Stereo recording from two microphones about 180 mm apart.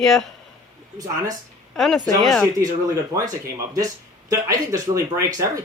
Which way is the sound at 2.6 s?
20° right (ahead or behind).